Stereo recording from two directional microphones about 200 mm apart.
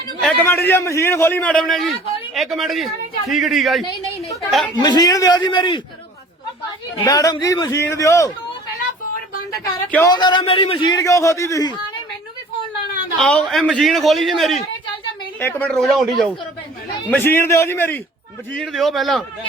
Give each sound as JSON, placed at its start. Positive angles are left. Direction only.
{"t": 0.2, "sound": "a man's voice", "side_deg": 5}
{"t": 4.8, "sound": "a man's voice", "side_deg": 20}
{"t": 7.0, "sound": "a man's voice", "side_deg": 15}
{"t": 9.9, "sound": "a man's voice", "side_deg": 15}
{"t": 13.1, "sound": "a man's voice", "side_deg": 5}
{"t": 17.1, "sound": "a man's voice", "side_deg": 10}